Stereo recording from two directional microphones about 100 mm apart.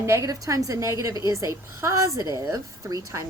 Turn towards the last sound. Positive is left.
turn(degrees=-35)  # may be behind; listen again after turning